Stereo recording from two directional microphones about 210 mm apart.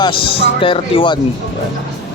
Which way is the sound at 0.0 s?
25° left (ahead or behind).